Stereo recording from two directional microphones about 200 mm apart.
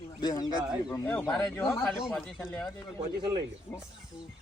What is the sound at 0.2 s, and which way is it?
Speech, 20° left (ahead or behind).